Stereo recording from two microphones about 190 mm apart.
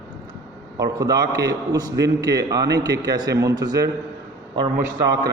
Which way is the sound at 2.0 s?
65° right (ahead or behind).